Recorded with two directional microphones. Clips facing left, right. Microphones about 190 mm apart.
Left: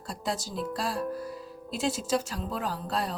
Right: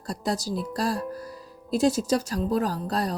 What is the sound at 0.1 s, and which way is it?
Speech, 40° right (ahead or behind).